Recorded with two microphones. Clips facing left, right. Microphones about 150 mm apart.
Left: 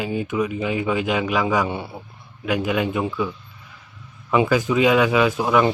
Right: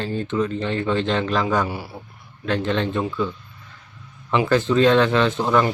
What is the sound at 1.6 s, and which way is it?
Speech, 25° left (ahead or behind).